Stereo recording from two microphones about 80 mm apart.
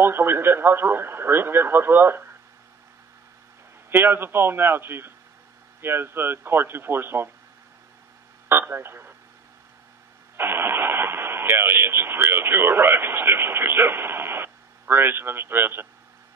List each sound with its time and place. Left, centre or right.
0.0 s speech: right
3.9 s speech: right
8.5 s speech: right
10.3 s speech: right